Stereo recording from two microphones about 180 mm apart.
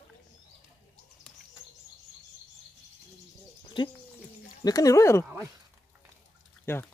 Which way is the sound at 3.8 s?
25° left (ahead or behind).